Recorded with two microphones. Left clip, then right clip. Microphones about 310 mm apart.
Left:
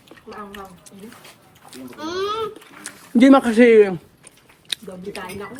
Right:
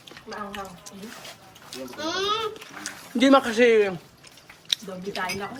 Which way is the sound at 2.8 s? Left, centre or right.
Centre.